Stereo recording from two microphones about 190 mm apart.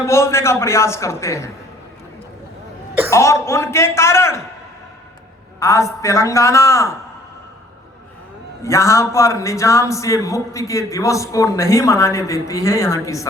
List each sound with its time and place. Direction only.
0.0 s a man's voice: 15° left (ahead or behind)
3.1 s a man's voice: 15° left (ahead or behind)
5.5 s a man's voice: 15° left (ahead or behind)
8.6 s a man's voice: 15° left (ahead or behind)